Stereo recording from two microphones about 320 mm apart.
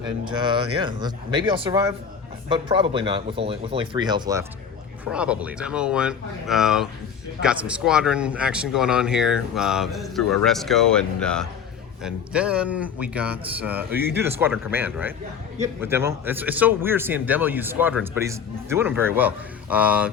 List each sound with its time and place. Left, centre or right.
0.3 s a man's voice: centre